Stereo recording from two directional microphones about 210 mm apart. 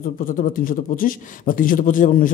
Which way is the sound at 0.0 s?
40° left (ahead or behind).